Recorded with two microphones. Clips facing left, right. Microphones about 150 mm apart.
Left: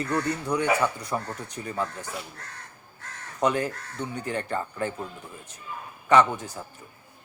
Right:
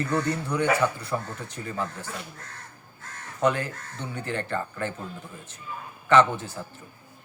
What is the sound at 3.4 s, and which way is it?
A man's voice, 15° left (ahead or behind).